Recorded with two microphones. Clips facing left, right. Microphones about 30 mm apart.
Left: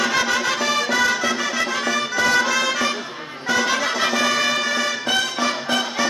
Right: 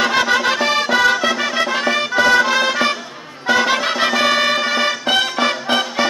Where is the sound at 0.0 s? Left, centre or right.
Right.